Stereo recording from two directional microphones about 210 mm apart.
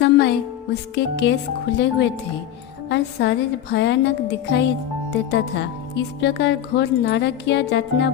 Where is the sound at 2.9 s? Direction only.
55° left (ahead or behind).